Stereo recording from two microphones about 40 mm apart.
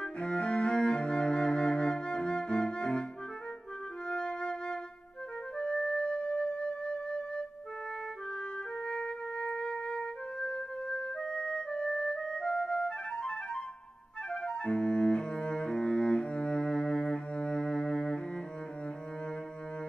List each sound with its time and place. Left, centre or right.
0.0 s music: left
4.1 s music: left
8.8 s music: left
14.3 s cello: left